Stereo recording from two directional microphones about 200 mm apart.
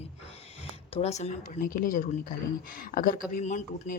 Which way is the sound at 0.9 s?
35° left (ahead or behind).